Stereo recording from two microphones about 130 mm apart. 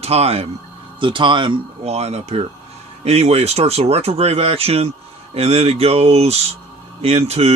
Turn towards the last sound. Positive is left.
turn(degrees=-55)  # may be behind; listen again after turning